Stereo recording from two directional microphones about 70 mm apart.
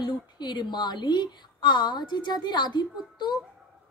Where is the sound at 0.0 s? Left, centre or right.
Left.